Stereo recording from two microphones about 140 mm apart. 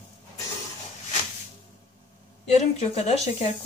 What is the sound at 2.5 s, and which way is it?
Speech, 50° left (ahead or behind).